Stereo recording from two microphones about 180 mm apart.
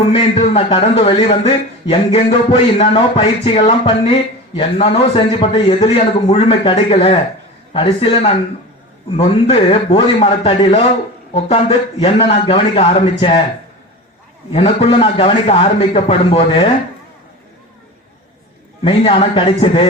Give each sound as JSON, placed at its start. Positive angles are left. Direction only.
{"t": 0.1, "sound": "a man's voice", "side_deg": 30}
{"t": 14.5, "sound": "a man's voice", "side_deg": 30}
{"t": 18.8, "sound": "a man's voice", "side_deg": 30}